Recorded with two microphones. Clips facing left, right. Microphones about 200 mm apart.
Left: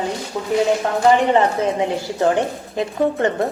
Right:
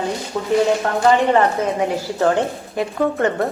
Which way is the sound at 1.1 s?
20° left (ahead or behind).